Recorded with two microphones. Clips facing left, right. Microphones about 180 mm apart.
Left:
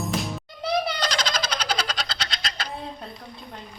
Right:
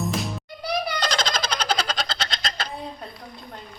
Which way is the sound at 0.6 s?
25° left (ahead or behind).